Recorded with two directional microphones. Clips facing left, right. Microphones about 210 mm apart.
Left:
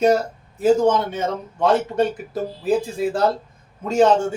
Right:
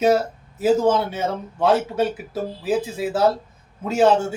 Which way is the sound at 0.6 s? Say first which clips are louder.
Left 1 dB; 5° right (ahead or behind).